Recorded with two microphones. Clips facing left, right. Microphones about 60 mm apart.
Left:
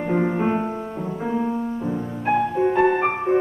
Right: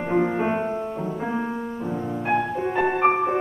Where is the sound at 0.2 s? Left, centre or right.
Centre.